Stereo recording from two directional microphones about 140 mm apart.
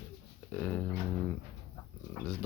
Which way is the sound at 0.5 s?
10° left (ahead or behind).